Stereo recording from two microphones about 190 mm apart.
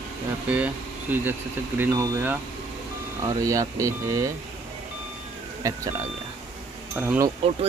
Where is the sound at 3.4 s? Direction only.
15° right (ahead or behind).